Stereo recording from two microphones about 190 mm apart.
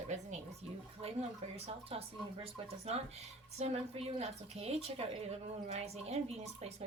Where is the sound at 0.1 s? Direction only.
35° right (ahead or behind).